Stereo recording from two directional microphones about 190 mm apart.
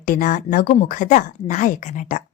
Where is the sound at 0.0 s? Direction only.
45° left (ahead or behind).